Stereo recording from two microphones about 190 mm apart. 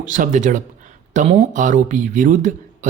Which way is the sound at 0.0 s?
45° right (ahead or behind).